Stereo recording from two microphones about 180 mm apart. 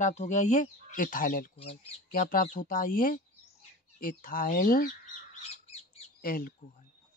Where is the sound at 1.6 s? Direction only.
35° left (ahead or behind).